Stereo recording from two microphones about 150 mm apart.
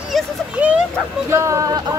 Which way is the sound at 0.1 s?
5° right (ahead or behind).